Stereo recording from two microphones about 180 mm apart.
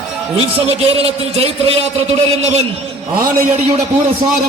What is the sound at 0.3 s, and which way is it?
A man's voice, 35° right (ahead or behind).